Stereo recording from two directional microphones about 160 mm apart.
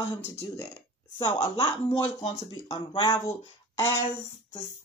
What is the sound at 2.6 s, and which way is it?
Speech, 35° left (ahead or behind).